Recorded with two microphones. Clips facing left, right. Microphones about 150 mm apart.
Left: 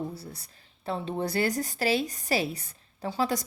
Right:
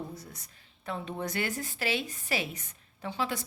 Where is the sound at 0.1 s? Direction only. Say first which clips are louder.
Left 4 dB; 30° left (ahead or behind).